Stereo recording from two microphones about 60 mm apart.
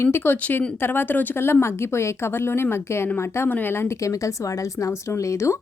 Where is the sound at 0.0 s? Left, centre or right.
Left.